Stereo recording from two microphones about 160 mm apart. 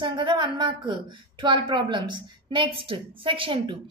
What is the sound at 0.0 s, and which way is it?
A woman's voice, 30° right (ahead or behind).